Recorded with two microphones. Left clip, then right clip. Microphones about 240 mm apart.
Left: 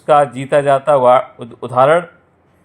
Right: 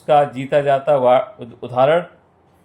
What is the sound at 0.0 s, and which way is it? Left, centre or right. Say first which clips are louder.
Speech: left 3 dB; centre.